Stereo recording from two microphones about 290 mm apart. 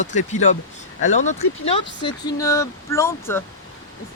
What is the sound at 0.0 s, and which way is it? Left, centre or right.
Speech, left.